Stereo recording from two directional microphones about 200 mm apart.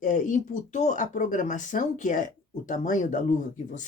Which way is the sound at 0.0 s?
40° left (ahead or behind).